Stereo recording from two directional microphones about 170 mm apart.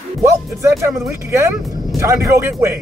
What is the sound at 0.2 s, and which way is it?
Speech, 15° right (ahead or behind).